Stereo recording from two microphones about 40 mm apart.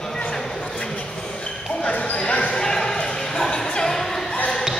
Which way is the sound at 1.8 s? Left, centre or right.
Left.